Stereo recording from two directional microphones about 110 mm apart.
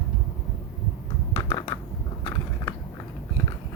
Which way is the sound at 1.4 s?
40° left (ahead or behind).